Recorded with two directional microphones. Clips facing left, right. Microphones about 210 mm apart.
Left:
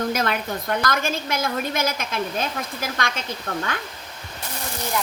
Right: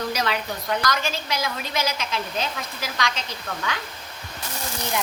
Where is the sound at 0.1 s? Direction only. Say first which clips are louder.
Left 2 dB; 50° left (ahead or behind).